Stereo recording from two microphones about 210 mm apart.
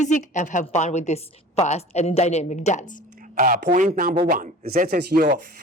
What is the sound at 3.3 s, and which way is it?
Speech, 40° right (ahead or behind).